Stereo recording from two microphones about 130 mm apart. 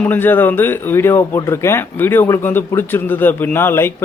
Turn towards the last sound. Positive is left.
turn(degrees=15)  # may be behind; listen again after turning